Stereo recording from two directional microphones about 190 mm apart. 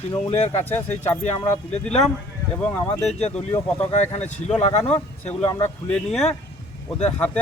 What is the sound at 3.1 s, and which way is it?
Speech, 35° left (ahead or behind).